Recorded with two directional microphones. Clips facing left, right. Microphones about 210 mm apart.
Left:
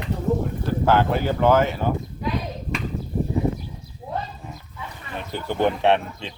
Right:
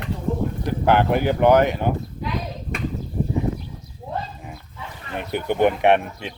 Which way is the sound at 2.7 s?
55° right (ahead or behind).